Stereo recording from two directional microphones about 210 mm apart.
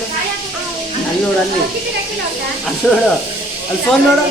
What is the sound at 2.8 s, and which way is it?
Speech, 5° left (ahead or behind).